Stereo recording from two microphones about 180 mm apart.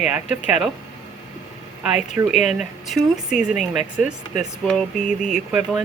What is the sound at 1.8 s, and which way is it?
Speech, 5° right (ahead or behind).